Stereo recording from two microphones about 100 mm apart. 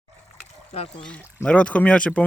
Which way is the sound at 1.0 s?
10° left (ahead or behind).